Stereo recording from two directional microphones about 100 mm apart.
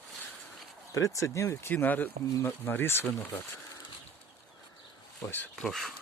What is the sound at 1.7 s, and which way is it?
Speech, 15° left (ahead or behind).